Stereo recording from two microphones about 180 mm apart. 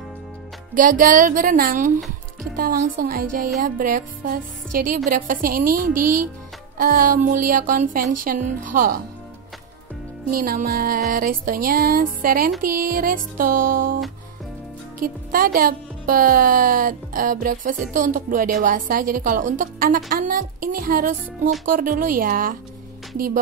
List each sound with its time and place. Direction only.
0.7 s speech: 50° right (ahead or behind)
10.3 s speech: 50° right (ahead or behind)